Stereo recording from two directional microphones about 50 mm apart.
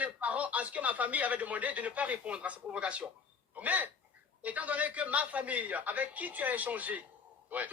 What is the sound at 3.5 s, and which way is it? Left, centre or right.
A man's voice, right.